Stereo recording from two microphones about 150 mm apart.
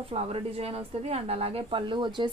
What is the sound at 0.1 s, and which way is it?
A woman's voice, 40° right (ahead or behind).